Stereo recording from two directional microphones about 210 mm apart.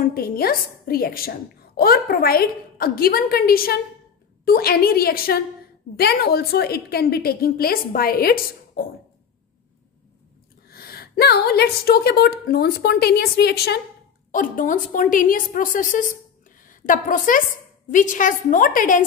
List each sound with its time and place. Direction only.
0.0 s a woman's voice: 45° left (ahead or behind)
10.7 s a woman's voice: 45° left (ahead or behind)
14.3 s a woman's voice: 40° left (ahead or behind)